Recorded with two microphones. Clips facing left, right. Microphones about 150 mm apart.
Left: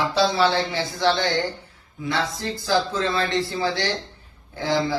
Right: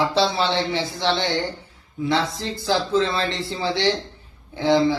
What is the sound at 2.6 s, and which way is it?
A man's voice, 25° right (ahead or behind).